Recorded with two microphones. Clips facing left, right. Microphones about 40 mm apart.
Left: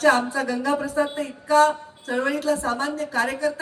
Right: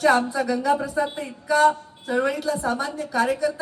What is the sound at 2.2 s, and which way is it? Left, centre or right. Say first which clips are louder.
A woman's voice: left 1 dB; left.